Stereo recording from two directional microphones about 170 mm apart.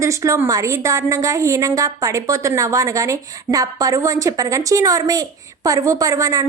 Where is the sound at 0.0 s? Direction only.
20° right (ahead or behind).